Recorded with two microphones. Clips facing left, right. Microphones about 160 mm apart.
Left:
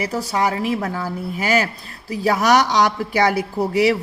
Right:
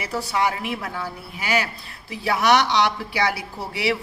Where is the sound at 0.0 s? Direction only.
40° left (ahead or behind).